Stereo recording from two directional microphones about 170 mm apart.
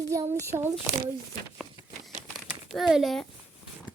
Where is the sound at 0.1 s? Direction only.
15° right (ahead or behind).